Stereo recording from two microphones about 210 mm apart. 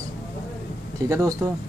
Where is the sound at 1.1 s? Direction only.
15° right (ahead or behind).